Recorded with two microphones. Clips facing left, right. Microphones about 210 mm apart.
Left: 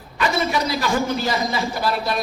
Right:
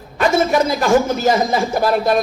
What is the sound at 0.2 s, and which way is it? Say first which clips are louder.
A man's voice: right 6 dB; 50° right (ahead or behind).